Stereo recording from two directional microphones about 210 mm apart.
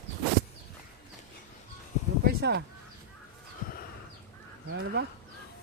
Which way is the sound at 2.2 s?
50° right (ahead or behind).